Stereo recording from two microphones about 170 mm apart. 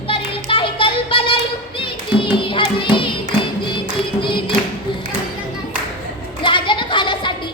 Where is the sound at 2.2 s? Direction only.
30° left (ahead or behind).